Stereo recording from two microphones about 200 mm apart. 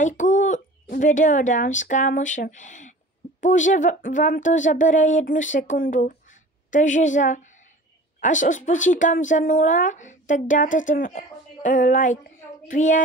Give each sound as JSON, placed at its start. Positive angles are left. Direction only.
{"t": 0.0, "sound": "speech", "side_deg": 40}